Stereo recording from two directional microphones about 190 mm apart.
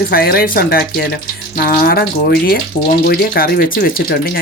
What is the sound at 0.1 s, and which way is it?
Speech, 55° left (ahead or behind).